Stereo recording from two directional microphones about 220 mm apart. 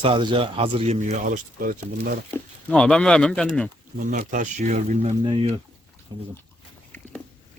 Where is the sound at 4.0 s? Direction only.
35° right (ahead or behind); by 6.2 s 20° right (ahead or behind).